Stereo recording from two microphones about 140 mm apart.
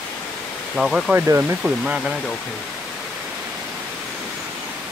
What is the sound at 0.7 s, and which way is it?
Speech, 5° right (ahead or behind).